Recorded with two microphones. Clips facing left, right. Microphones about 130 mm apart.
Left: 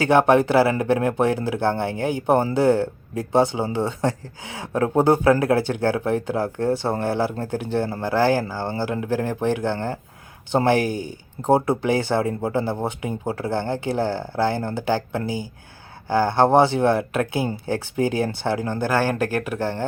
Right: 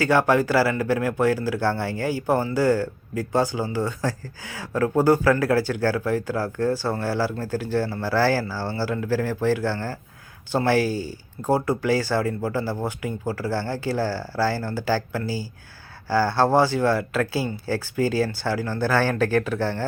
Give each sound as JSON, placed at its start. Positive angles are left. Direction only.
{"t": 0.0, "sound": "speech", "side_deg": 20}